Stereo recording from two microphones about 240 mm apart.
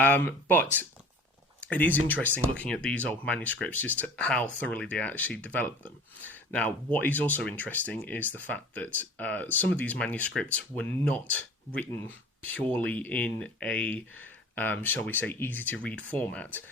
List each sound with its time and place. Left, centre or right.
0.0 s speech: centre